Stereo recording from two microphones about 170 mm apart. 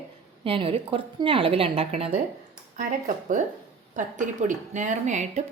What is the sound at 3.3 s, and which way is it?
Speech, 50° right (ahead or behind).